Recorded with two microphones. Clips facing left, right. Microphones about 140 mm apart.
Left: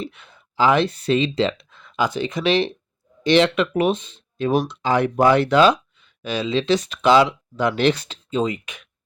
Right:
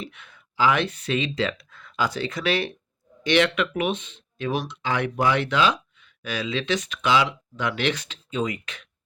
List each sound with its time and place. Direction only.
0.0 s speech: 30° left (ahead or behind)
6.2 s speech: 25° left (ahead or behind)